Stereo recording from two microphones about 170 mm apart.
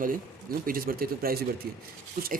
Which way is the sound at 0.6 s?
55° right (ahead or behind).